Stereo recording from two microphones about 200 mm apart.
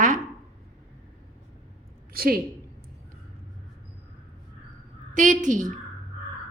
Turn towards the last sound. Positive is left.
turn(degrees=-40)  # may be behind; listen again after turning